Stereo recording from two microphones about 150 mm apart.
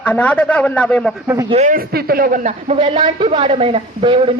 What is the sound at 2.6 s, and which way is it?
A man's voice, 40° right (ahead or behind).